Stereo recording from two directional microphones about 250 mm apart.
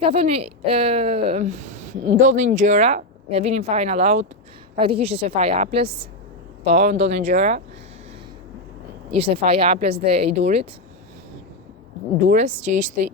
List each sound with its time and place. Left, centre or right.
0.0 s a woman's voice: right
9.0 s a woman's voice: right
12.2 s a woman's voice: right